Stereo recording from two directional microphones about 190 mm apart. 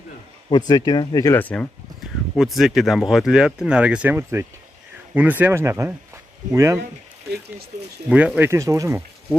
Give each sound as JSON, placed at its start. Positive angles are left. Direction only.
{"t": 0.5, "sound": "speech", "side_deg": 20}
{"t": 8.1, "sound": "speech", "side_deg": -5}